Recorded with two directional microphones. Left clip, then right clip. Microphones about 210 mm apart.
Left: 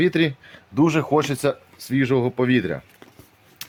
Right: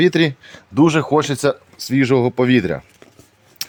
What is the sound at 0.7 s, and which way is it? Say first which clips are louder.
Speech: right 4 dB; 35° right (ahead or behind).